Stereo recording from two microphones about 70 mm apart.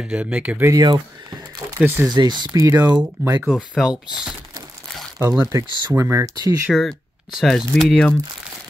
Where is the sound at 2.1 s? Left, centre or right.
Right.